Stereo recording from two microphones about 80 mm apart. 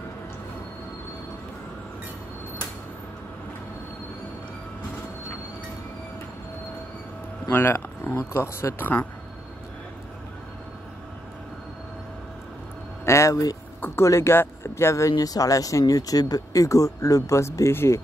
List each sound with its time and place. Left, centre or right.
7.4 s speech: left
13.0 s speech: left
13.7 s speech: left